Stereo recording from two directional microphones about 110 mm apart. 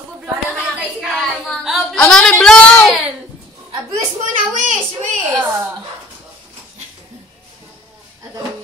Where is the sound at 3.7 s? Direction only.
40° right (ahead or behind).